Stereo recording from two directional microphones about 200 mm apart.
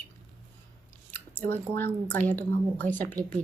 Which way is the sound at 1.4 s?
10° left (ahead or behind).